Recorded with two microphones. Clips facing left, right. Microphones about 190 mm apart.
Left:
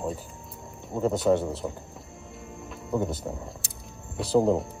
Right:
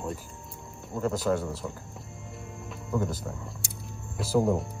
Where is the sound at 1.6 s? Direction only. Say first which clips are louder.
Left 4 dB; 30° left (ahead or behind).